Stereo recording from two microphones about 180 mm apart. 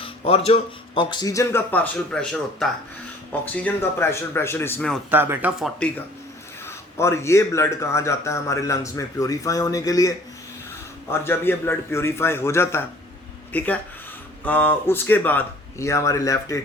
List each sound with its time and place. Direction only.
0.0 s speech: 35° left (ahead or behind); by 4.9 s 10° left (ahead or behind)
5.1 s speech: 10° right (ahead or behind)
6.7 s speech: 15° left (ahead or behind)